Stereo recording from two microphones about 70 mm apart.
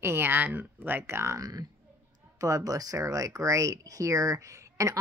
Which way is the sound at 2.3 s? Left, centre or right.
Right.